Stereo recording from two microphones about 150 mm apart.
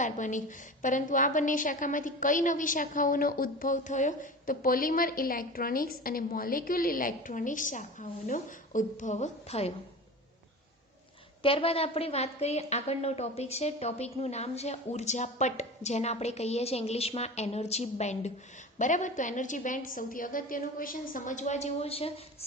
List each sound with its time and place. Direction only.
0.0 s a woman's voice: 55° left (ahead or behind)
11.4 s a woman's voice: 40° left (ahead or behind)